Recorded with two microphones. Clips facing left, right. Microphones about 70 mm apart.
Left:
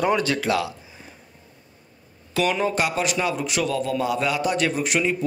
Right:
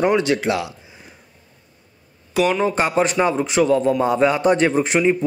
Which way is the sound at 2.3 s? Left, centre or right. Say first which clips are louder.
Right 4 dB; centre.